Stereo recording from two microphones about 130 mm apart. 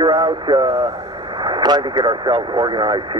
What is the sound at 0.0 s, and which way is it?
Speech, 35° right (ahead or behind).